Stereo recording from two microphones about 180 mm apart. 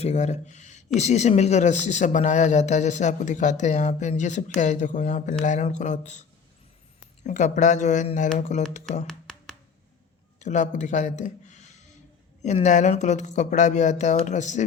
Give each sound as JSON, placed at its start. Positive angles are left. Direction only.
{"t": 0.0, "sound": "speech", "side_deg": 40}
{"t": 7.3, "sound": "speech", "side_deg": 45}
{"t": 9.0, "sound": "a sound", "side_deg": 5}
{"t": 10.4, "sound": "speech", "side_deg": 40}